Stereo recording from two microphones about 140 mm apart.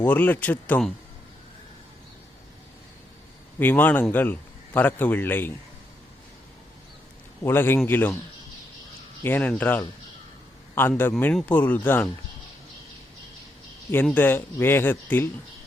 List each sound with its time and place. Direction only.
0.0 s a man's voice: 10° left (ahead or behind)
3.6 s a man's voice: 15° left (ahead or behind)
7.4 s a man's voice: 15° left (ahead or behind)
9.2 s a man's voice: 15° left (ahead or behind)
13.9 s a man's voice: 15° left (ahead or behind)